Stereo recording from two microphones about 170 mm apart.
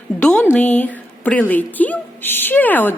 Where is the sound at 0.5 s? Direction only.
10° left (ahead or behind).